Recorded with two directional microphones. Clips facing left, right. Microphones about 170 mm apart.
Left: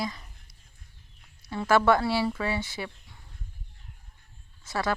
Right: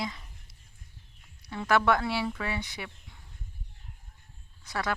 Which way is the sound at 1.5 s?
5° left (ahead or behind).